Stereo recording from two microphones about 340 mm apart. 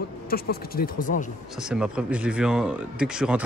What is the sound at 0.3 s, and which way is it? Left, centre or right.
Speech, left.